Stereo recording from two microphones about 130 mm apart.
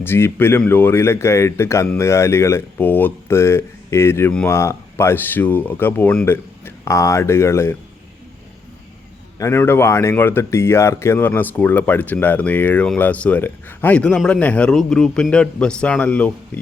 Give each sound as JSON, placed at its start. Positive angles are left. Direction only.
{"t": 0.0, "sound": "speech", "side_deg": 15}
{"t": 9.4, "sound": "speech", "side_deg": 20}